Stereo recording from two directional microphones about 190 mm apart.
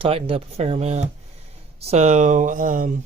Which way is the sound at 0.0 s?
30° right (ahead or behind).